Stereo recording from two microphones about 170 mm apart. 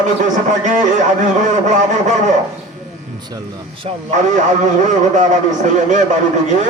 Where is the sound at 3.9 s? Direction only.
35° right (ahead or behind).